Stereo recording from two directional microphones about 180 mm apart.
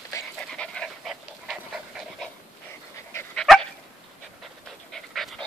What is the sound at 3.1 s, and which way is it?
Dog, 10° left (ahead or behind).